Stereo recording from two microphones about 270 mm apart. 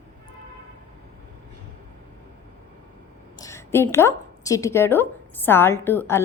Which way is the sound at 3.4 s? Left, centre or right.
Centre.